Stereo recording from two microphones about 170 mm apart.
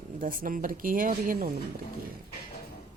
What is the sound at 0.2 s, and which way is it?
Speech, 55° right (ahead or behind).